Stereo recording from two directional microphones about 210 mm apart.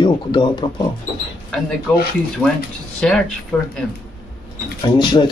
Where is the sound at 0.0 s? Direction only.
20° left (ahead or behind).